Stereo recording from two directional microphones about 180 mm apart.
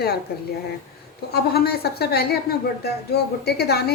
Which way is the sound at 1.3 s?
60° left (ahead or behind).